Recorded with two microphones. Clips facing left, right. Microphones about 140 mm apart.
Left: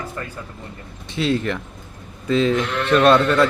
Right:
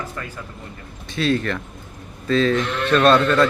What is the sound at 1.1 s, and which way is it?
A man's voice, 25° left (ahead or behind).